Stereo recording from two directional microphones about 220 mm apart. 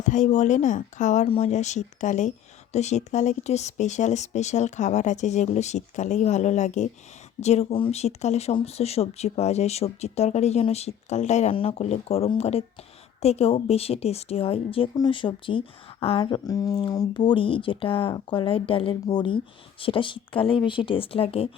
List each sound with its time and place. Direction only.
0.0 s a woman's voice: 35° left (ahead or behind)